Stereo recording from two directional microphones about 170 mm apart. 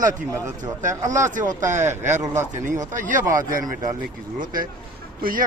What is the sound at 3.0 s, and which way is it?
Speech, 50° right (ahead or behind).